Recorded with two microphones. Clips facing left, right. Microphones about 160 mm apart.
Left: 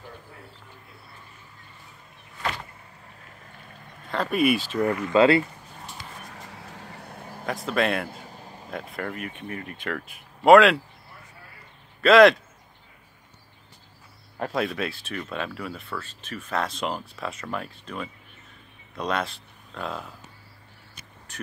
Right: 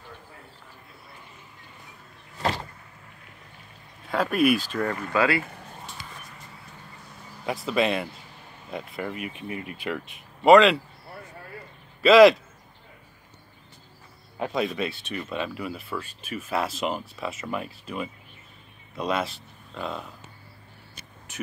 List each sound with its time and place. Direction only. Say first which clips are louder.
4.1 s speech: right 1 dB; centre (ahead or behind)
5.1 s speech: left 6 dB; 25° left (ahead or behind)
6.3 s vehicle: left 4 dB; 90° left; by 7.4 s 55° left (ahead or behind)
7.4 s speech: right 1 dB; centre (ahead or behind)
8.1 s vehicle: left 5 dB; 45° left (ahead or behind)
8.6 s speech: even; centre (ahead or behind)
12.0 s speech: right 1 dB; centre (ahead or behind)
14.4 s speech: even; centre (ahead or behind)